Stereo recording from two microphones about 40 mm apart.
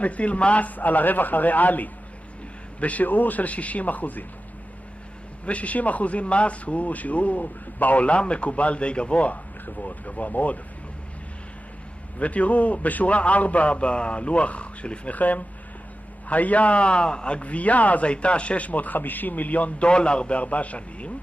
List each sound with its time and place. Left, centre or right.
0.0 s a man's voice: left
3.1 s a man's voice: left
5.4 s a man's voice: left
12.2 s a man's voice: left
19.9 s a man's voice: left